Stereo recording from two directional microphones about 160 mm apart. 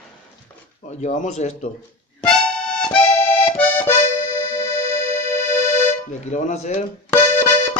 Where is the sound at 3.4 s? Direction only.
10° left (ahead or behind).